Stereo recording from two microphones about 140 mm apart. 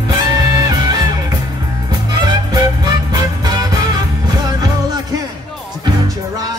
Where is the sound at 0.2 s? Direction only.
30° right (ahead or behind).